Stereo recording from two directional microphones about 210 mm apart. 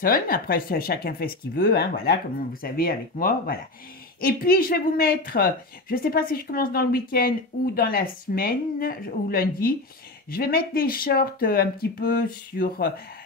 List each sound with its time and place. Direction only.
0.0 s speech: 45° left (ahead or behind)